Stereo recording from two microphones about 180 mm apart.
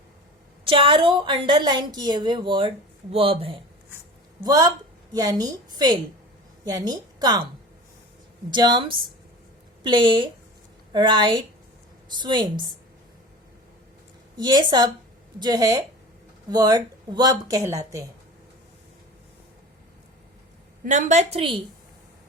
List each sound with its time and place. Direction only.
0.6 s a woman's voice: 30° right (ahead or behind)
4.4 s a woman's voice: 20° right (ahead or behind)
8.4 s a woman's voice: 25° right (ahead or behind)
14.3 s a woman's voice: 25° right (ahead or behind)
20.8 s a woman's voice: 45° right (ahead or behind)